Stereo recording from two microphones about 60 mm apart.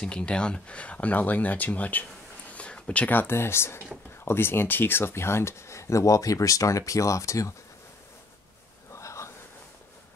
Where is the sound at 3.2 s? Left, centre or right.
Left.